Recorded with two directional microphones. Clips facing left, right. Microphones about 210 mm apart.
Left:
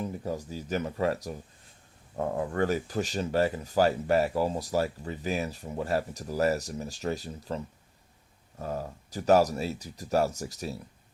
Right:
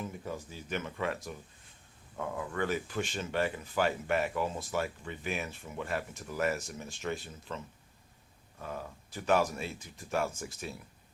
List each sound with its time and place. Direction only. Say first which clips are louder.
0.0 s speech: left 6 dB; 40° left (ahead or behind)